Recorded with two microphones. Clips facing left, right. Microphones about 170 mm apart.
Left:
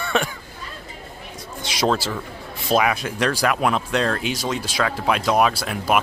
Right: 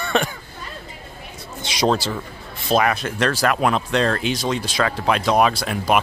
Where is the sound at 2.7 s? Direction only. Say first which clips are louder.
Right 1 dB; 5° left (ahead or behind).